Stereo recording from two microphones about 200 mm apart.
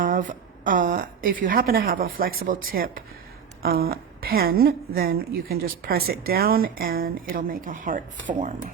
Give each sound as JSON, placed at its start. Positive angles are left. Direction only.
{"t": 0.0, "sound": "a woman's voice", "side_deg": -40}